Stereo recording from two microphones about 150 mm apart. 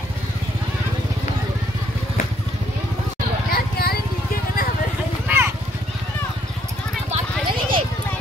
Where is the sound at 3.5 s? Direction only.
90° left.